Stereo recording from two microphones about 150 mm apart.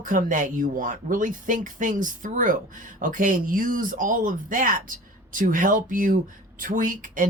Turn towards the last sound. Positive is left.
turn(degrees=-65)  # may be behind; listen again after turning